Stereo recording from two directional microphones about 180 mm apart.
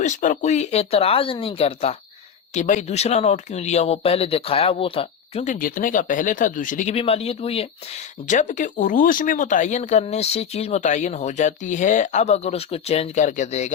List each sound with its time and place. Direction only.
0.0 s speech: 45° left (ahead or behind)
5.5 s speech: 50° left (ahead or behind)
6.9 s speech: 35° left (ahead or behind)
8.3 s speech: 45° left (ahead or behind)